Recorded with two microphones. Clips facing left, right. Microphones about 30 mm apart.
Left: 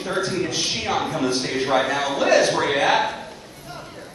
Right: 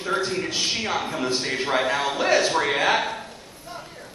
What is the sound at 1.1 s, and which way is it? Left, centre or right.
Speech, right.